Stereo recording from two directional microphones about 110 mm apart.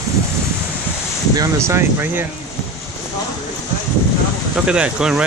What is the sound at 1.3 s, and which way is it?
Speech, 30° right (ahead or behind).